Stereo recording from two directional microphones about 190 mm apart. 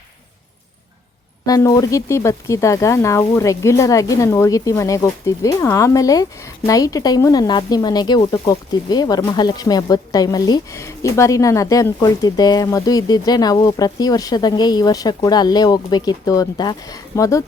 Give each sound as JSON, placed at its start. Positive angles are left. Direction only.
{"t": 1.5, "sound": "speech", "side_deg": 20}